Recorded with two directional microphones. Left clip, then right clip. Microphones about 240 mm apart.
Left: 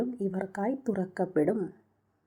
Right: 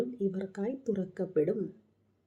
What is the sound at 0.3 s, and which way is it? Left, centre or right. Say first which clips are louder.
Speech: left 3 dB; left.